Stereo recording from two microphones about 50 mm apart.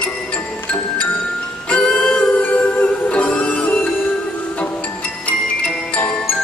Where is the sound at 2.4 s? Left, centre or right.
Left.